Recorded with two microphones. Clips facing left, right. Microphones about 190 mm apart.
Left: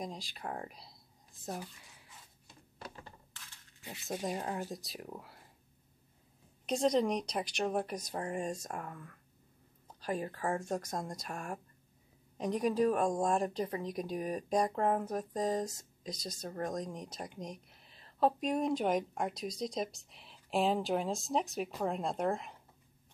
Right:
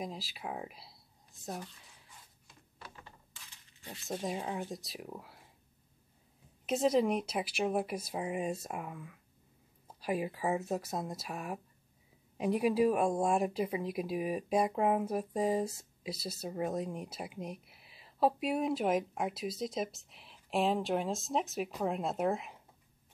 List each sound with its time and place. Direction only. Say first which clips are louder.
0.0 s speech: right 1 dB; 5° right (ahead or behind)
2.4 s a sound: left 5 dB; 35° left (ahead or behind)
3.3 s speech: left 1 dB; 5° left (ahead or behind)
6.6 s speech: right 1 dB; 5° right (ahead or behind)